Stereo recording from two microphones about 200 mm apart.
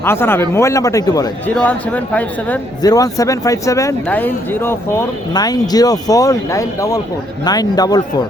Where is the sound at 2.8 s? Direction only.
20° left (ahead or behind).